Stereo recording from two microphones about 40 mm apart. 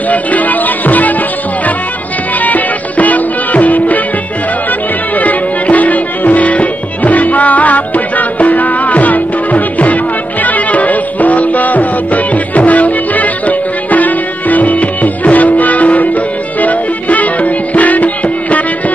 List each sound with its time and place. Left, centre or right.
0.1 s music: left
2.4 s music: left
5.1 s music: left